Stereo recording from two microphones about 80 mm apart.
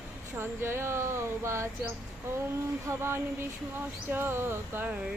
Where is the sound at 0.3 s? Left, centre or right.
Right.